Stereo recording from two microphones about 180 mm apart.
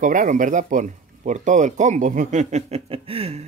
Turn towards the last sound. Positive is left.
turn(degrees=-35)  # may be behind; listen again after turning